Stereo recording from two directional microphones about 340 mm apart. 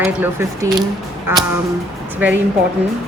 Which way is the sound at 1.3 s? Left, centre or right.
Centre.